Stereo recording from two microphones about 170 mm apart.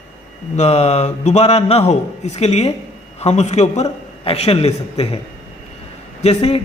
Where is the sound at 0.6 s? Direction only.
40° left (ahead or behind).